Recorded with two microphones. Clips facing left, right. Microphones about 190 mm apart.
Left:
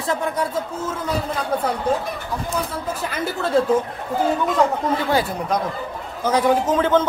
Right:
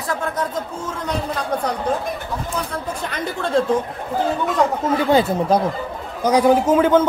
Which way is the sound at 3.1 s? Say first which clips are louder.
Even; 5° left (ahead or behind).